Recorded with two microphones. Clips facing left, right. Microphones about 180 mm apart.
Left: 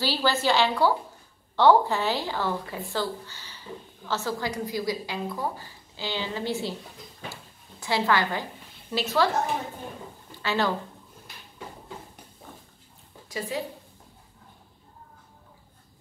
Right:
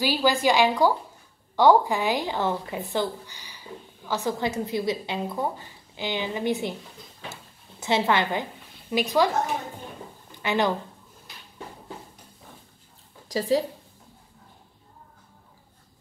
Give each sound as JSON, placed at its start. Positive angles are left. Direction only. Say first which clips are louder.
{"t": 0.0, "sound": "a woman's voice", "louder": "right 3 dB", "side_deg": -15}
{"t": 7.8, "sound": "a woman's voice", "louder": "right 2 dB", "side_deg": -20}
{"t": 10.3, "sound": "a woman's voice", "louder": "right 2 dB", "side_deg": -20}
{"t": 13.3, "sound": "a woman's voice", "louder": "right 8 dB", "side_deg": -35}